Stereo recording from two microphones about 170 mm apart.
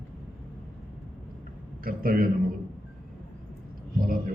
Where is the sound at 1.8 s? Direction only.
55° right (ahead or behind).